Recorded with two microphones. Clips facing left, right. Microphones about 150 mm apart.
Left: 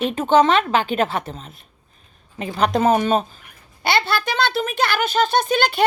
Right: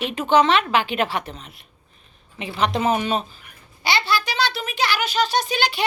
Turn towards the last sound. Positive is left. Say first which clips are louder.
# left 4 dB
turn(degrees=50)  # may be behind; listen again after turning